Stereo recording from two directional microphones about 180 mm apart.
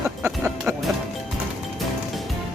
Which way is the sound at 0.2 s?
10° right (ahead or behind).